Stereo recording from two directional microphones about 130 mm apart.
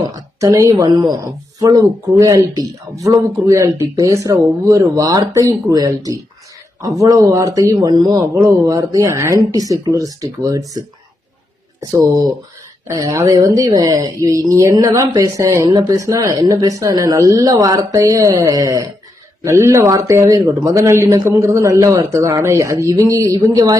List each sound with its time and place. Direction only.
0.3 s a woman's voice: 25° right (ahead or behind)
11.8 s a woman's voice: 25° right (ahead or behind)